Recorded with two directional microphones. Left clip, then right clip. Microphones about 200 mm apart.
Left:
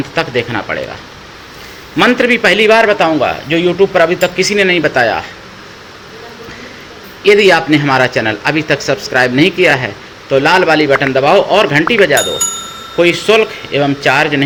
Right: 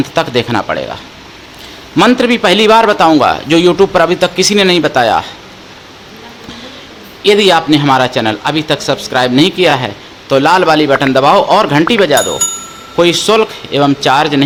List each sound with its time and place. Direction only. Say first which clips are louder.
0.1 s a man's voice: even; 25° right (ahead or behind)
2.0 s a man's voice: right 1 dB; 20° right (ahead or behind)
7.3 s a man's voice: even; 15° right (ahead or behind)
12.4 s bicycle bell: right 1 dB; centre (ahead or behind)
13.0 s a man's voice: right 1 dB; 20° right (ahead or behind)